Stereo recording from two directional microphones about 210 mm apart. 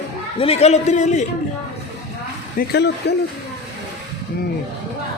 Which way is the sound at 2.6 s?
55° left (ahead or behind).